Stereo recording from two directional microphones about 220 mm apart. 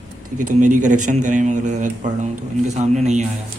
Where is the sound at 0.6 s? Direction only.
35° right (ahead or behind).